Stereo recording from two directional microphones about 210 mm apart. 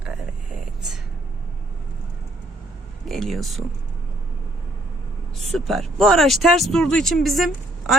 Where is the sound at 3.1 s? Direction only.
Centre (ahead or behind).